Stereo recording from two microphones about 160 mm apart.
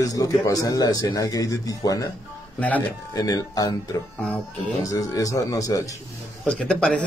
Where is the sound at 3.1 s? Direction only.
20° left (ahead or behind).